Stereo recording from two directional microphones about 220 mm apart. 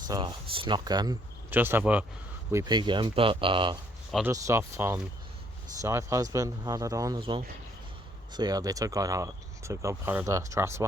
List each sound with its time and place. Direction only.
0.1 s speech: 20° right (ahead or behind)